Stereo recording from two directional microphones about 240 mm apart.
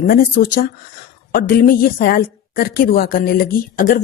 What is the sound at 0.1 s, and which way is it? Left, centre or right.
A woman's voice, left.